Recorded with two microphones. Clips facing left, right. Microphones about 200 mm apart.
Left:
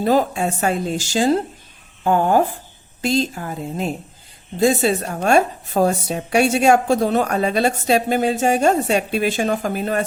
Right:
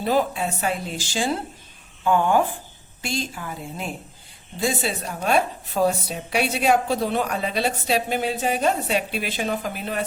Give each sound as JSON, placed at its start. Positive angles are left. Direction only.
{"t": 0.0, "sound": "a woman's voice", "side_deg": 45}